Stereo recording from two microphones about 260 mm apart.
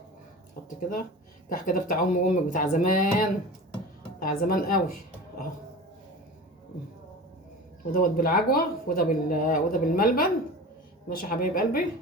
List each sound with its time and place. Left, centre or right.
0.8 s speech: left
7.9 s speech: left